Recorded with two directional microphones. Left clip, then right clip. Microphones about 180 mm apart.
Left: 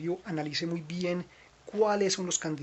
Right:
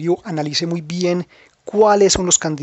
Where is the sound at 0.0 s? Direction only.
50° right (ahead or behind).